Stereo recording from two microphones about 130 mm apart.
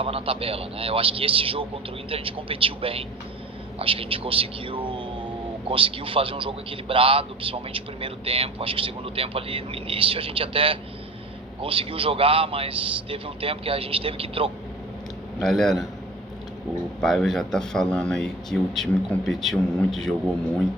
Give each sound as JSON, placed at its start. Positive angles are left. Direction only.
{"t": 0.0, "sound": "a man's voice", "side_deg": -45}
{"t": 15.4, "sound": "speech", "side_deg": 0}
{"t": 17.0, "sound": "speech", "side_deg": 5}